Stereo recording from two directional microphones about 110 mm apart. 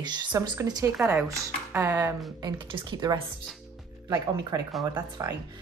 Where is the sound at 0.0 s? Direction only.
40° right (ahead or behind).